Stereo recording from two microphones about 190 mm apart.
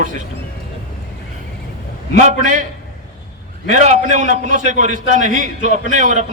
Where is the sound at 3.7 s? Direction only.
40° right (ahead or behind).